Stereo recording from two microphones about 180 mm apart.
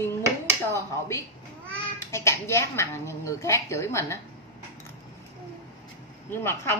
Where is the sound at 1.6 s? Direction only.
15° left (ahead or behind).